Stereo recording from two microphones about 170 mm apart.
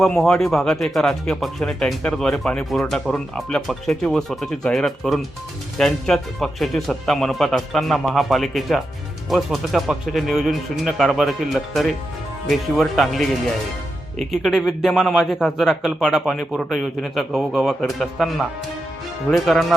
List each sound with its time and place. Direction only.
0.0 s speech: centre (ahead or behind)
14.4 s speech: centre (ahead or behind)